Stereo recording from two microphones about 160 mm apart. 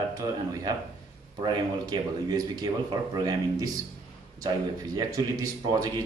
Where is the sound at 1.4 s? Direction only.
25° right (ahead or behind).